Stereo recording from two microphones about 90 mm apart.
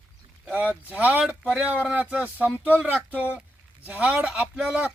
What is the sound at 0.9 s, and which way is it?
Speech, 15° right (ahead or behind).